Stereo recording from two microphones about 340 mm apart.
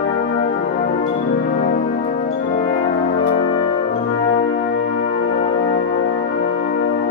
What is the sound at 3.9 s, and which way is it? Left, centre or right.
Brass instrument, centre.